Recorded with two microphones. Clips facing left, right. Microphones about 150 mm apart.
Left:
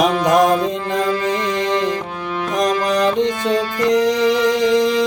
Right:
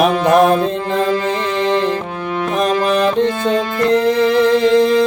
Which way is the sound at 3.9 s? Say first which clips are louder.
Right 1 dB; 55° right (ahead or behind).